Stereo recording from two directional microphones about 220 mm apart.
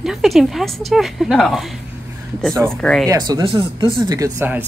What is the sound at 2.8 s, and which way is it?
Speech, 5° left (ahead or behind).